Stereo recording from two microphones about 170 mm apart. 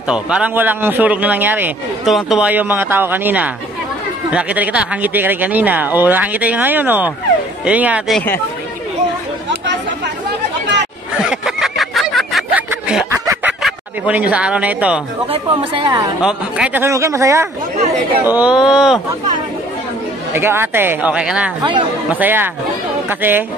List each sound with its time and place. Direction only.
0.1 s a man's voice: 5° right (ahead or behind)
11.2 s a sound: centre (ahead or behind)
13.6 s speech: 5° right (ahead or behind)
15.3 s speech: 30° right (ahead or behind)
16.2 s a man's voice: 5° right (ahead or behind)
20.3 s a man's voice: 15° right (ahead or behind)